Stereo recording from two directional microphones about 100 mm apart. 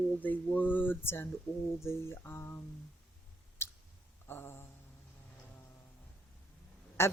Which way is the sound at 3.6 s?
25° left (ahead or behind).